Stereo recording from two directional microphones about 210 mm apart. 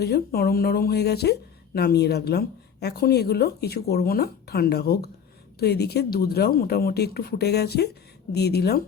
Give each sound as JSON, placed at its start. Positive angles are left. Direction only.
{"t": 0.0, "sound": "speech", "side_deg": 45}